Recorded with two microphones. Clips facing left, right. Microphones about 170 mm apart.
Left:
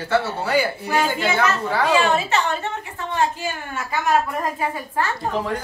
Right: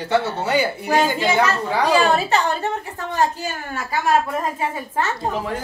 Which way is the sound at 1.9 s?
35° right (ahead or behind).